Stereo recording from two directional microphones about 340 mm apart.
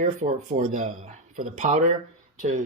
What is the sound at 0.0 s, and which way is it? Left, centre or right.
Speech, right.